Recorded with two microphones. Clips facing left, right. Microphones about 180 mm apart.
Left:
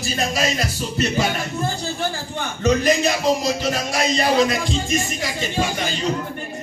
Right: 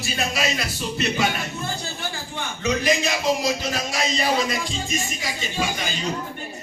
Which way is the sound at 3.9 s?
50° left (ahead or behind).